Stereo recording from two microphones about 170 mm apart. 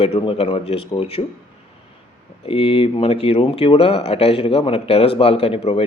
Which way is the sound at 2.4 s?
30° left (ahead or behind).